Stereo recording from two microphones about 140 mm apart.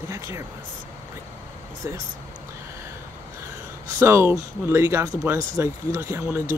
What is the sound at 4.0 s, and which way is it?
Speech, 15° right (ahead or behind).